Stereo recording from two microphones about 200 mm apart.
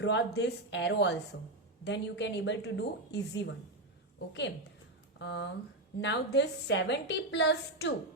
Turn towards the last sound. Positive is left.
turn(degrees=60)  # may be behind; listen again after turning